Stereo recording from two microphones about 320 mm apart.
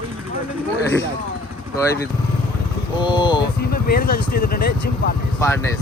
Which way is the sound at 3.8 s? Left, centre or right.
Left.